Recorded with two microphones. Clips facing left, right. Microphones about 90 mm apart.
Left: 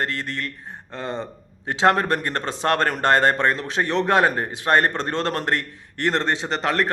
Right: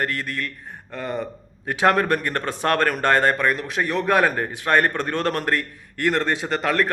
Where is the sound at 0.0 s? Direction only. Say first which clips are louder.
Right 1 dB; 25° left (ahead or behind).